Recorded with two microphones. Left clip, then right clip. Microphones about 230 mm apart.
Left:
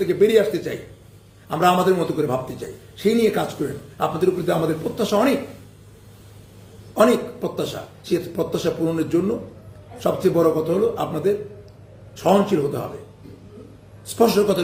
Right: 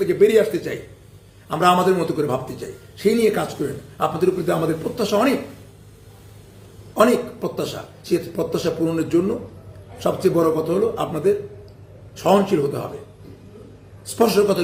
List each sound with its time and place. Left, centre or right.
0.0 s a man's voice: centre
6.9 s a man's voice: centre
14.2 s a man's voice: centre